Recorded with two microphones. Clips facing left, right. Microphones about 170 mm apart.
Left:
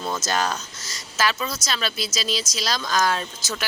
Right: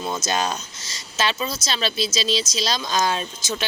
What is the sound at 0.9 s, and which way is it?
Speech, 25° right (ahead or behind).